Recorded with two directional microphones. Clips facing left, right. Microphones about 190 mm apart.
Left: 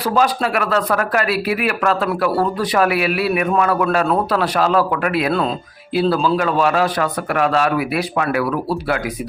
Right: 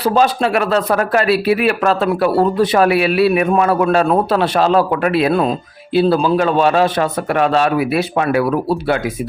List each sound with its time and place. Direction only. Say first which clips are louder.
0.0 s a man's voice: right 3 dB; 25° right (ahead or behind)